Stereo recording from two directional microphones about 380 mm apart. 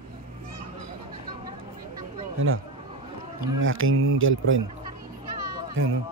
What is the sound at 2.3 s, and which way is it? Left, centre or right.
Speech, right.